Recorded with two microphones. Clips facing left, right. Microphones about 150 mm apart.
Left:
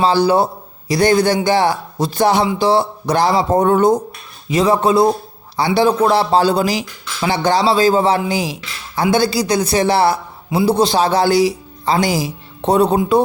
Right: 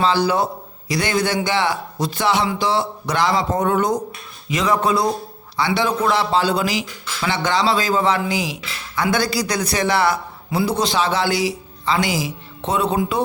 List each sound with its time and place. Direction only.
0.0 s a man's voice: 35° left (ahead or behind)